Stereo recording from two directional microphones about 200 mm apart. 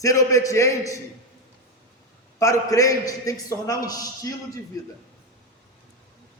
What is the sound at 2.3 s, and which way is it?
A man's voice, 15° left (ahead or behind).